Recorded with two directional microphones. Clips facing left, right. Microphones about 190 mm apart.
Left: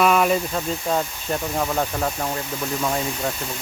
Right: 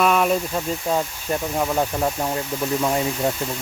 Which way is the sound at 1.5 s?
10° right (ahead or behind).